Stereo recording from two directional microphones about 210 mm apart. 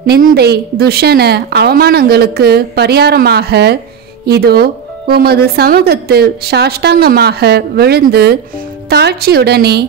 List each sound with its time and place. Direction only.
0.0 s speech: 45° right (ahead or behind)